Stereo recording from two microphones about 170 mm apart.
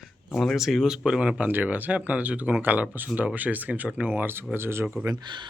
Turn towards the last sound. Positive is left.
turn(degrees=-25)  # may be behind; listen again after turning